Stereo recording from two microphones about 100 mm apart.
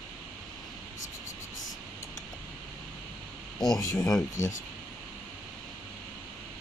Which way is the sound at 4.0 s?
5° left (ahead or behind).